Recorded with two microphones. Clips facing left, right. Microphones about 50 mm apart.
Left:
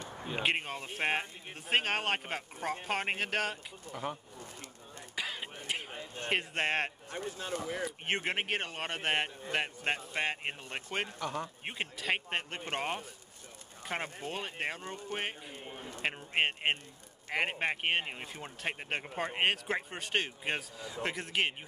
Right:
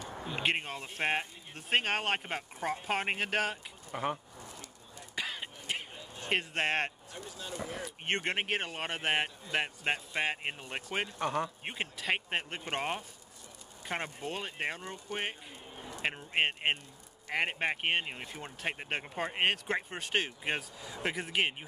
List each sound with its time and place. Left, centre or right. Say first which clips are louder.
0.4 s speech: even; centre
3.9 s speech: right 4 dB; right
5.1 s a sound: even; centre
6.3 s speech: right 1 dB; centre
7.1 s speech: left 5 dB; left
7.8 s speech: right 4 dB; centre
11.1 s speech: right 4 dB; right
11.6 s speech: even; centre